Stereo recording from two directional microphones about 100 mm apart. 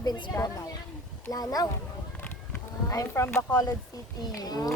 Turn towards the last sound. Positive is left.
turn(degrees=40)  # may be behind; listen again after turning